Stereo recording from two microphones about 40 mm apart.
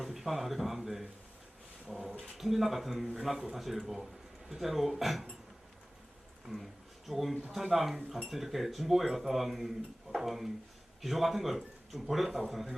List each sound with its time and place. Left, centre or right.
0.0 s a sound: centre
1.9 s speech: centre
7.1 s speech: centre